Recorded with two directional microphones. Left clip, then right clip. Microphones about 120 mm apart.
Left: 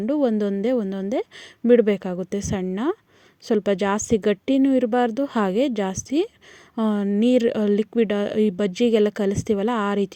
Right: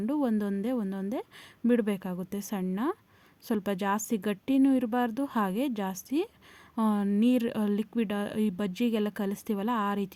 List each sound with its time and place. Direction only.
0.0 s a woman's voice: 25° left (ahead or behind)